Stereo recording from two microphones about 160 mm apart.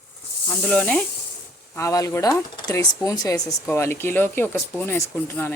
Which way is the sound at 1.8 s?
20° left (ahead or behind).